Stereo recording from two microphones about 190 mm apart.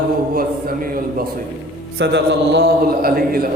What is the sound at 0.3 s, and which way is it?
Speech, 50° right (ahead or behind).